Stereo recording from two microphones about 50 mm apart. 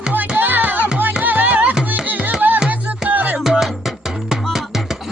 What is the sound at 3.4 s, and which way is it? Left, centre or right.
Music, centre.